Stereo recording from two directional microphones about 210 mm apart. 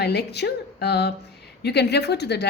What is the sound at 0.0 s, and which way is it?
A woman's voice, 50° left (ahead or behind).